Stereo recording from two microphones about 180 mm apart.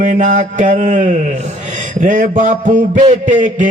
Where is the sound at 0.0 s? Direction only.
45° right (ahead or behind).